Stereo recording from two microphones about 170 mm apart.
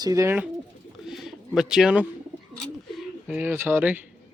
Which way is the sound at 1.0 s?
Centre (ahead or behind).